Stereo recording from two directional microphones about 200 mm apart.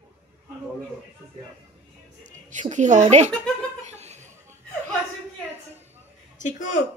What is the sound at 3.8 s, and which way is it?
Laughter, 35° right (ahead or behind).